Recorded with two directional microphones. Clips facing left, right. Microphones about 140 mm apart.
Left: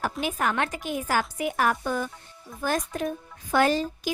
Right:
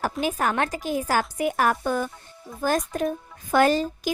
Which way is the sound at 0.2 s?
40° right (ahead or behind).